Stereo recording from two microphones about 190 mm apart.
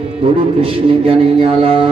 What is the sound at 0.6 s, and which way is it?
Speech, 30° right (ahead or behind).